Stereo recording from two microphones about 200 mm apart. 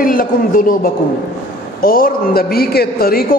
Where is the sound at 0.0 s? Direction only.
45° left (ahead or behind).